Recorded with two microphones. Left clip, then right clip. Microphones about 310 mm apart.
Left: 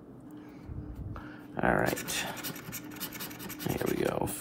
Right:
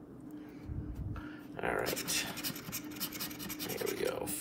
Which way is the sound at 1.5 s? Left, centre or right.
Centre.